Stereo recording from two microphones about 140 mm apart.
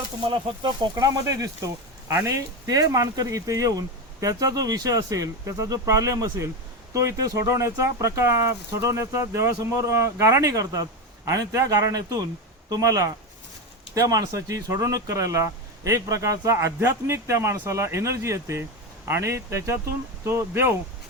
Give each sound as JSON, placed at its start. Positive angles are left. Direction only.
{"t": 0.2, "sound": "speech", "side_deg": -35}